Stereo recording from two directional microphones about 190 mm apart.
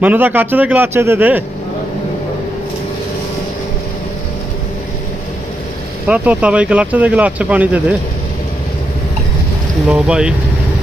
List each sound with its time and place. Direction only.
0.0 s speech: 10° right (ahead or behind)
6.1 s speech: 5° right (ahead or behind)
9.9 s speech: 5° right (ahead or behind)